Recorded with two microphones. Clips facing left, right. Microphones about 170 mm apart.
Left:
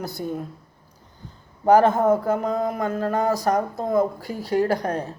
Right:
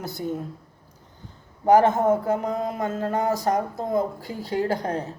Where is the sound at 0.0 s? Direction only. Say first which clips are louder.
Even; 20° right (ahead or behind).